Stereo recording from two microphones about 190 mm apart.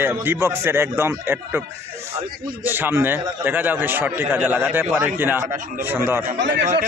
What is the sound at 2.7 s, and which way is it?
A man's voice, 10° right (ahead or behind).